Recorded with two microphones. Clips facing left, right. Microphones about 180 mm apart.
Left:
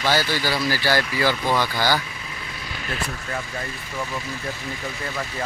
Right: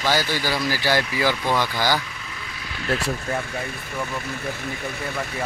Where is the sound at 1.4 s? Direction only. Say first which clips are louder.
Even; 5° left (ahead or behind).